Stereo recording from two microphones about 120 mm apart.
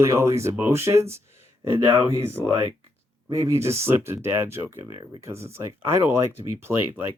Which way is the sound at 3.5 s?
20° right (ahead or behind).